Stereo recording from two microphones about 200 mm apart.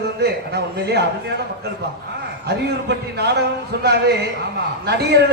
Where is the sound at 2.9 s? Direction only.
55° right (ahead or behind).